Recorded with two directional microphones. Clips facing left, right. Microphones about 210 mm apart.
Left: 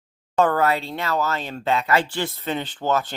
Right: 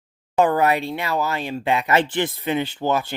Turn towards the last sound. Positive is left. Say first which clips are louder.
# right 1 dB
turn(degrees=-10)  # may be behind; listen again after turning